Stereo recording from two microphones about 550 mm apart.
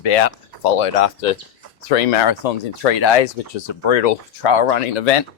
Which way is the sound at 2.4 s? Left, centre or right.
Left.